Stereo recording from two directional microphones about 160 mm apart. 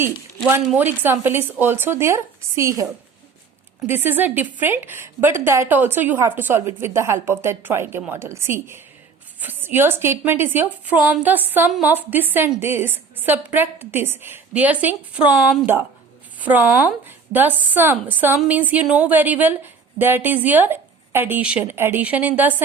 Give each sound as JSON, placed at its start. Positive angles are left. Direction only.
{"t": 0.0, "sound": "a woman's voice", "side_deg": -15}